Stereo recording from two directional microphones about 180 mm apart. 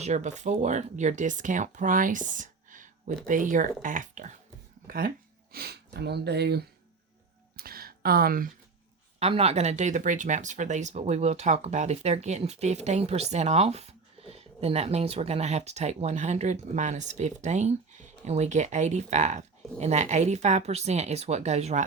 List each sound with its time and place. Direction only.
0.0 s speech: 40° right (ahead or behind); by 6.7 s 65° right (ahead or behind)
7.5 s a sound: 55° right (ahead or behind)
9.1 s speech: 35° right (ahead or behind)